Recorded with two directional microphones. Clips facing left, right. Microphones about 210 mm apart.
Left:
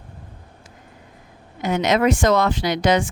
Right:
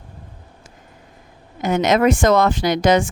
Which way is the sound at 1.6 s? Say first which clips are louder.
Right 3 dB; 45° right (ahead or behind).